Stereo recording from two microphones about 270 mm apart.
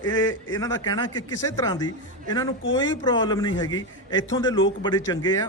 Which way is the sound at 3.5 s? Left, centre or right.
Left.